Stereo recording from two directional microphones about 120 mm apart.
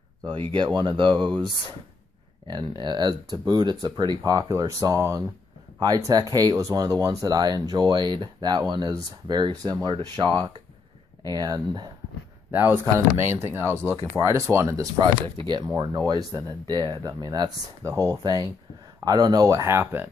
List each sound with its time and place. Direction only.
0.6 s speech: 40° right (ahead or behind)
2.4 s speech: 40° right (ahead or behind)
12.4 s speech: 15° right (ahead or behind)
15.2 s speech: 35° right (ahead or behind); by 20.1 s 20° right (ahead or behind)